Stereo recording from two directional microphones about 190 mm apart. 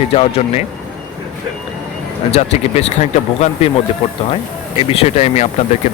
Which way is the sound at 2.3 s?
35° left (ahead or behind).